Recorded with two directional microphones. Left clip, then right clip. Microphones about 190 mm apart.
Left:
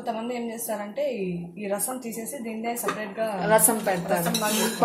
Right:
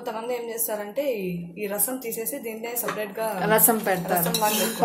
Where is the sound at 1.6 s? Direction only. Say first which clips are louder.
Even; 60° right (ahead or behind).